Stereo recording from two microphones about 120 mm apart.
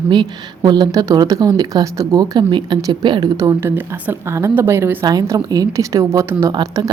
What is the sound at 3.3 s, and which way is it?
A woman's voice, 25° right (ahead or behind).